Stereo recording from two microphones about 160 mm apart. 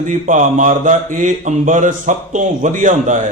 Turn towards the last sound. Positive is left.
turn(degrees=-50)  # may be behind; listen again after turning